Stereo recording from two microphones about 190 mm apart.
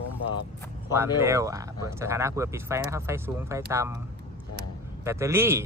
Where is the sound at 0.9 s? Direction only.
15° right (ahead or behind).